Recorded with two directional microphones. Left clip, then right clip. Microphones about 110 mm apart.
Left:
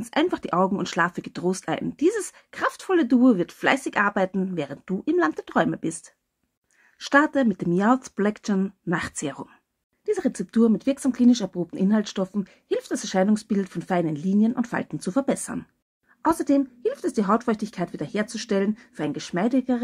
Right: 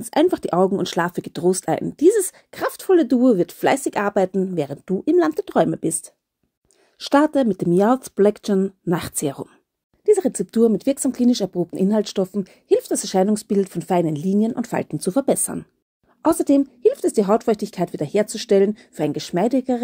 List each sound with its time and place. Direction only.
0.0 s speech: 30° right (ahead or behind)